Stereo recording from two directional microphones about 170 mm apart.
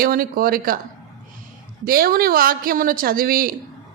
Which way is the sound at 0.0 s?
60° right (ahead or behind).